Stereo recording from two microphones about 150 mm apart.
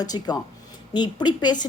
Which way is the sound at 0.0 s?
25° left (ahead or behind).